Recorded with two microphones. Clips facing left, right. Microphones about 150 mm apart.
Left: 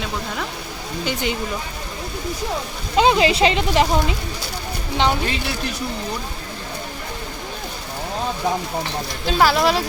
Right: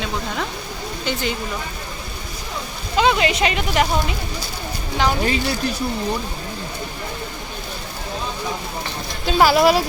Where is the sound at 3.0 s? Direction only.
25° left (ahead or behind).